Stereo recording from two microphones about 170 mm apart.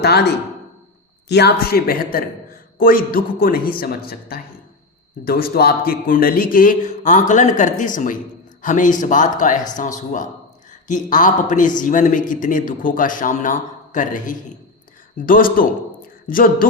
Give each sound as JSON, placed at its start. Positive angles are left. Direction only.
{"t": 0.0, "sound": "a man's voice", "side_deg": 75}
{"t": 10.7, "sound": "a man's voice", "side_deg": 45}